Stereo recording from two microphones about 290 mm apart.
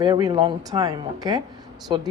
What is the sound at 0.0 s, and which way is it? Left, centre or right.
A woman's voice, centre.